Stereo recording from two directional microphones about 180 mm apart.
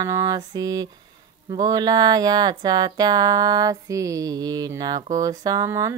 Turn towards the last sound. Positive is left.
turn(degrees=-20)  # may be behind; listen again after turning